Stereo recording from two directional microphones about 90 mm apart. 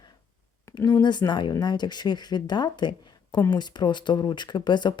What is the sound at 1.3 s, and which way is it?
Speech, 55° left (ahead or behind).